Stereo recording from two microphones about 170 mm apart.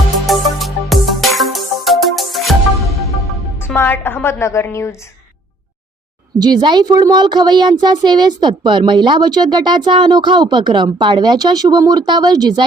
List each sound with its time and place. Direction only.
0.3 s music: centre (ahead or behind)
3.6 s a woman's voice: 10° left (ahead or behind)
6.4 s speech: 25° right (ahead or behind)